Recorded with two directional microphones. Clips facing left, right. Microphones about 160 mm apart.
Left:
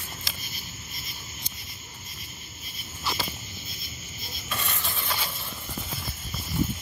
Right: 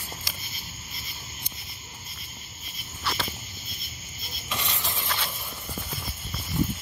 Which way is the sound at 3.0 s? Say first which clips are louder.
Even; 5° left (ahead or behind).